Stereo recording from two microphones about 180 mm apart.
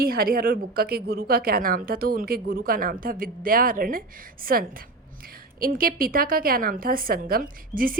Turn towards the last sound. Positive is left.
turn(degrees=-50)  # may be behind; listen again after turning